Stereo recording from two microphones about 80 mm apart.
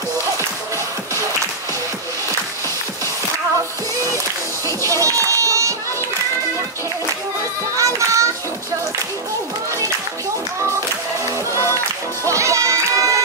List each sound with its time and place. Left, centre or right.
4.8 s crowd: right
7.7 s children playing: right
12.3 s music: right